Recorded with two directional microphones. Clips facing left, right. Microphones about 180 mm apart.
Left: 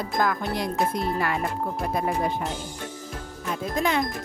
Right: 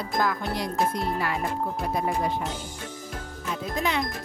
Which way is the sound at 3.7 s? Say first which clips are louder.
Left 3 dB; 45° left (ahead or behind).